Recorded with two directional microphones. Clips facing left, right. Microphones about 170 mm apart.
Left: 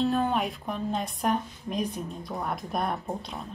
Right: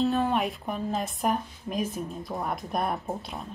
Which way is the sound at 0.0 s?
Centre (ahead or behind).